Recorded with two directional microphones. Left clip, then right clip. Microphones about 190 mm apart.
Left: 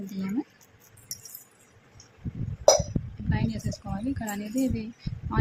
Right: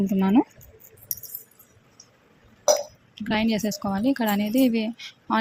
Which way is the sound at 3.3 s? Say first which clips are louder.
Right 11 dB; 40° right (ahead or behind).